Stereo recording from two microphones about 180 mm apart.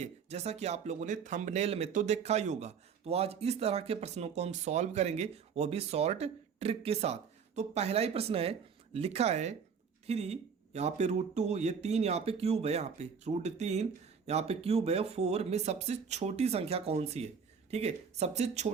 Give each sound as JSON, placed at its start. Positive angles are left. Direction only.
{"t": 0.0, "sound": "speech", "side_deg": -35}